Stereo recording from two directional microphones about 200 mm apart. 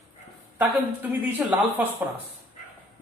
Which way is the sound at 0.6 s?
10° right (ahead or behind).